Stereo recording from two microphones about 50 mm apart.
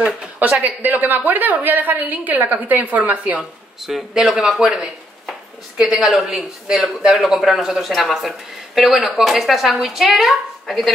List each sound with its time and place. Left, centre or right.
0.4 s a woman's voice: right
3.8 s speech: centre